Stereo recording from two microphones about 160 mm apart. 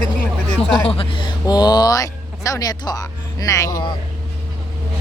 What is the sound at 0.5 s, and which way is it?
Speech, 5° left (ahead or behind).